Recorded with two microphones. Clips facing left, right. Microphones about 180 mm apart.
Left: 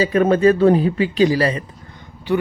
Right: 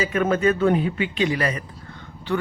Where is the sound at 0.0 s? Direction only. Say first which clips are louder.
Left 6 dB; 35° left (ahead or behind).